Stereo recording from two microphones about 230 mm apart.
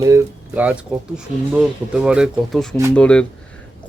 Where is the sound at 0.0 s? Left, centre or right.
Centre.